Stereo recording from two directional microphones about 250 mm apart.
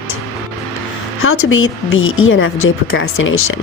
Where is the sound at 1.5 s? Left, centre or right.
Left.